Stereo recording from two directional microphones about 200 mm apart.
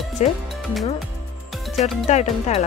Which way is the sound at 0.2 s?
35° left (ahead or behind).